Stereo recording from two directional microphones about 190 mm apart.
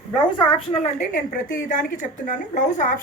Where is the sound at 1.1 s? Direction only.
45° left (ahead or behind).